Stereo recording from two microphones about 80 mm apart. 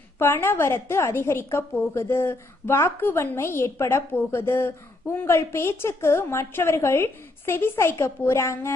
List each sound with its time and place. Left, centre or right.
0.2 s a woman's voice: left